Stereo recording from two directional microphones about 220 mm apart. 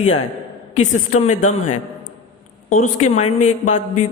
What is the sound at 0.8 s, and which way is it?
A man's voice, 30° left (ahead or behind).